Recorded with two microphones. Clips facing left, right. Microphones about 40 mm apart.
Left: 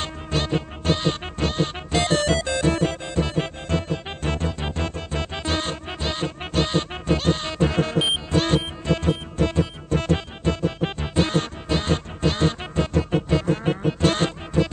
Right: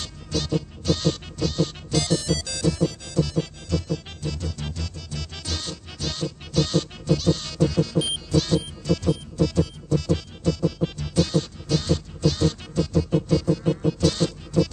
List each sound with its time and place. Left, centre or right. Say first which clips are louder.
0.0 s music: left 4 dB; left